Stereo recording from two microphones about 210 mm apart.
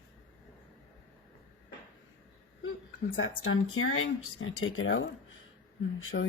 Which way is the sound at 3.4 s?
75° left (ahead or behind).